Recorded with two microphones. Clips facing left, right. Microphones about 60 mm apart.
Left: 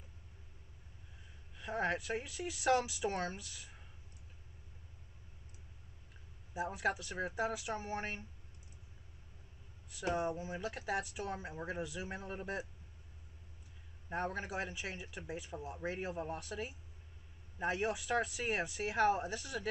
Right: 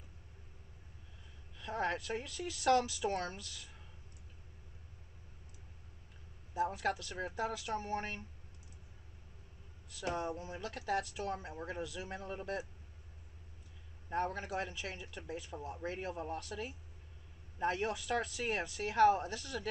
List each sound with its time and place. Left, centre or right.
1.6 s speech: centre
6.5 s speech: centre
10.0 s speech: centre
14.0 s speech: centre